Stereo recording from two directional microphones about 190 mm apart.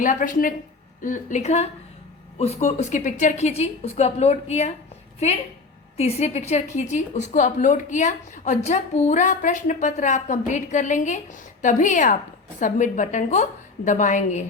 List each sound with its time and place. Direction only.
0.0 s a woman's voice: 45° left (ahead or behind)
6.0 s a woman's voice: 35° left (ahead or behind)